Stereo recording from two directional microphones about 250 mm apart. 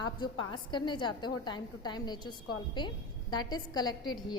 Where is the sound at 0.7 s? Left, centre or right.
Centre.